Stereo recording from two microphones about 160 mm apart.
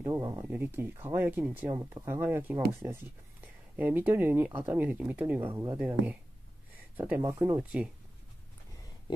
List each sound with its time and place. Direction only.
0.0 s speech: 20° right (ahead or behind)
7.0 s speech: 15° right (ahead or behind)